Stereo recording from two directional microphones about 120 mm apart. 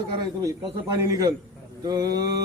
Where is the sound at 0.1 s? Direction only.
40° right (ahead or behind).